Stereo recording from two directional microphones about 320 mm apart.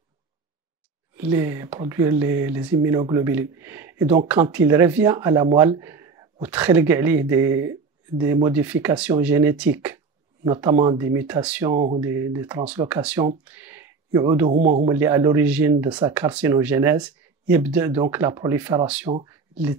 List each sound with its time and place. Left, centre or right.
1.1 s speech: centre